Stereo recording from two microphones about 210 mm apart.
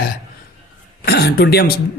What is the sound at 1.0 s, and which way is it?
Speech, 50° left (ahead or behind).